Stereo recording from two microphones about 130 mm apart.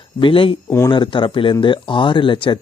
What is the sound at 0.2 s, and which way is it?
Speech, 40° left (ahead or behind).